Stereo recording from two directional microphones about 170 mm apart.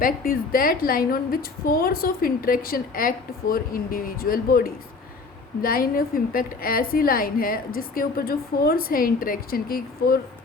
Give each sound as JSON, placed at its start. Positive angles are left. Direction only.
{"t": 0.0, "sound": "a woman's voice", "side_deg": 55}